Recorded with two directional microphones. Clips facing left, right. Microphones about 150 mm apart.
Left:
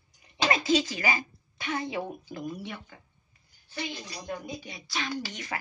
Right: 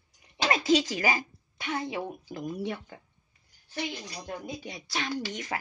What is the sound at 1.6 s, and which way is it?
Speech, 5° right (ahead or behind).